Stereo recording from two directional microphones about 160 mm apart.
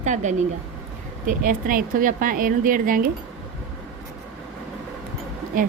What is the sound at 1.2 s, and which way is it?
A woman's voice, 60° right (ahead or behind).